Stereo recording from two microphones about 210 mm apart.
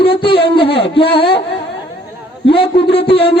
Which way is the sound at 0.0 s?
25° left (ahead or behind).